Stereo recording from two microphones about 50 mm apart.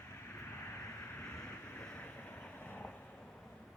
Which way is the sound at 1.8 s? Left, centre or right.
Left.